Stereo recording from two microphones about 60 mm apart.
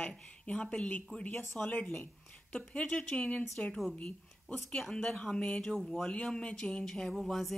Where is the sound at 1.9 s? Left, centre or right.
Left.